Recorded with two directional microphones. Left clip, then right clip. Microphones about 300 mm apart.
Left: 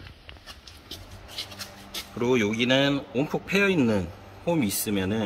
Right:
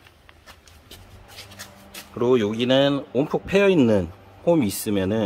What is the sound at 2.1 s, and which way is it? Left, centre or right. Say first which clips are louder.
Speech: right 4 dB; right.